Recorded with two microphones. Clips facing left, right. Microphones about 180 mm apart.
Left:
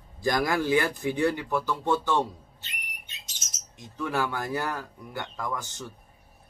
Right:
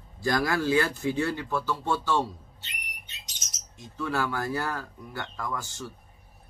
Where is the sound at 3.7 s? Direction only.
15° left (ahead or behind).